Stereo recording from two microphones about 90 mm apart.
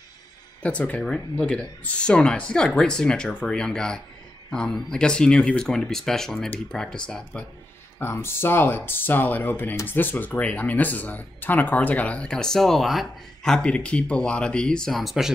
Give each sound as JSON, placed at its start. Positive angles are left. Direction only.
{"t": 0.6, "sound": "speech", "side_deg": 15}
{"t": 8.0, "sound": "speech", "side_deg": 25}